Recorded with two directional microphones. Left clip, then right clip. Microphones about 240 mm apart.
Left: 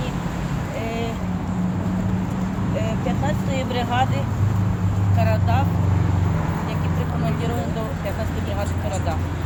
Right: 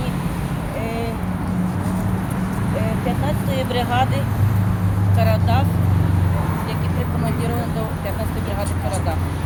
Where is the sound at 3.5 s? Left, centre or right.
Right.